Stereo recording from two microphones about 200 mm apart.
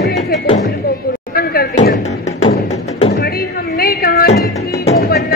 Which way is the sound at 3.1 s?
50° left (ahead or behind).